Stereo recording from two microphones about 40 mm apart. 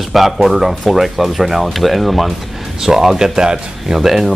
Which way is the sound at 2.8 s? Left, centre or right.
Centre.